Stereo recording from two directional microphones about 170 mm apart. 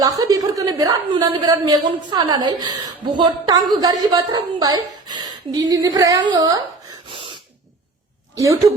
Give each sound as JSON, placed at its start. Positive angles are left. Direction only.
{"t": 0.0, "sound": "a woman's voice", "side_deg": -20}
{"t": 7.1, "sound": "gasp", "side_deg": -30}